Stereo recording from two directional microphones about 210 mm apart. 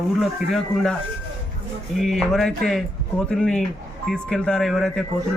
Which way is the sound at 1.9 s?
Centre (ahead or behind).